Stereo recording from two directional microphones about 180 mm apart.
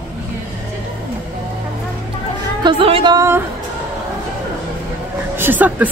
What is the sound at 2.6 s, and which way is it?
Speech, 30° right (ahead or behind).